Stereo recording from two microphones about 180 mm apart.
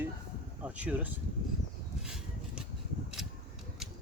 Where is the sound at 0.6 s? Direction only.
5° right (ahead or behind).